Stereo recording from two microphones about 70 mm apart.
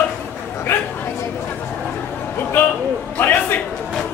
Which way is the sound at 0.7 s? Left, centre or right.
Left.